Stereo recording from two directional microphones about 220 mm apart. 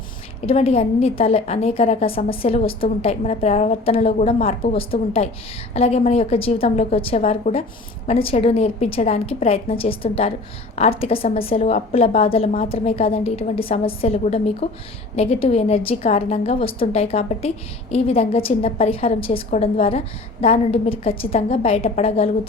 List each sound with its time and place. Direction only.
0.4 s a woman's voice: 25° left (ahead or behind)